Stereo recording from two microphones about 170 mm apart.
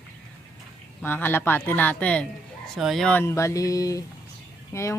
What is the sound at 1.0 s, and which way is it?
Speech, 10° left (ahead or behind).